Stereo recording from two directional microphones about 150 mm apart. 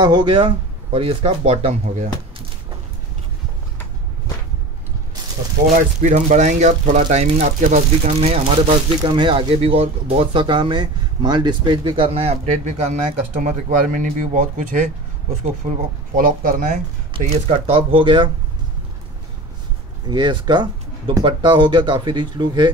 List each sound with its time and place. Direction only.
0.0 s speech: 30° right (ahead or behind)
5.8 s speech: 50° right (ahead or behind)
9.0 s speech: 30° right (ahead or behind)
13.4 s speech: 60° right (ahead or behind)
17.2 s speech: 45° right (ahead or behind)
20.1 s speech: 30° right (ahead or behind)